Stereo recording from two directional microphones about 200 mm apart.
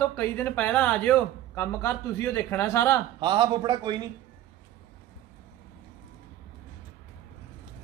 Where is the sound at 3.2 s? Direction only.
20° right (ahead or behind).